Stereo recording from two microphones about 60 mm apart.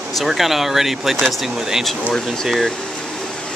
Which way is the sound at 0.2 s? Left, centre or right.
Centre.